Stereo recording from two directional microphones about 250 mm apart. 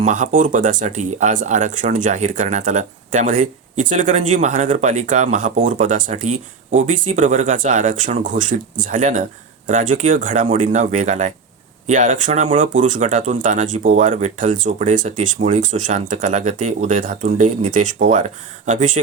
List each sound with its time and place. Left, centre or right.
0.0 s speech: right